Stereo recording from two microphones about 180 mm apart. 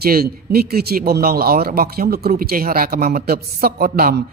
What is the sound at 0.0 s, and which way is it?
Speech, 55° right (ahead or behind).